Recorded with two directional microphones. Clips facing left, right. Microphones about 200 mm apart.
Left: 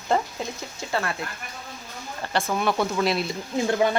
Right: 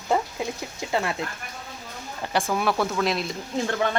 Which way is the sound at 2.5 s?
Centre (ahead or behind).